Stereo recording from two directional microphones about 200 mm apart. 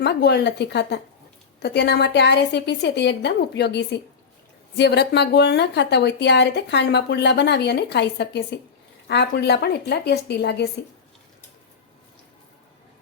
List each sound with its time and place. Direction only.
0.0 s speech: 55° left (ahead or behind)